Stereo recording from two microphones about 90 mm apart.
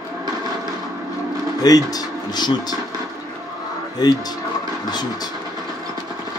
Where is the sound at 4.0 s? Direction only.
45° left (ahead or behind).